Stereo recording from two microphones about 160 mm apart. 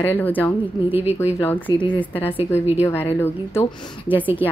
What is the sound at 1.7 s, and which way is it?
Speech, 30° left (ahead or behind).